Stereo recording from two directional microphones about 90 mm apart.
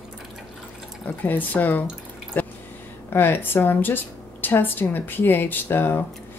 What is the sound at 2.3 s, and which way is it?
Drip, 20° left (ahead or behind).